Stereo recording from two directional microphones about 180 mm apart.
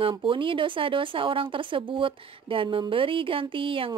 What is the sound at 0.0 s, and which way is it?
Speech, 30° right (ahead or behind).